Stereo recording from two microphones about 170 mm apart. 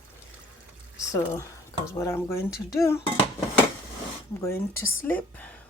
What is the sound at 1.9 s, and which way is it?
A woman's voice, 15° left (ahead or behind).